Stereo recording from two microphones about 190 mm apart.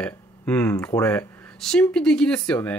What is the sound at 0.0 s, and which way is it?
Speech, 10° left (ahead or behind).